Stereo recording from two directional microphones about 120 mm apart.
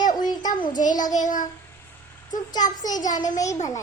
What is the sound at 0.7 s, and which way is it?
Child singing, 90° left.